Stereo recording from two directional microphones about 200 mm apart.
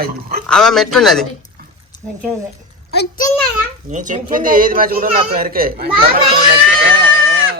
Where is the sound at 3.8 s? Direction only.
40° right (ahead or behind).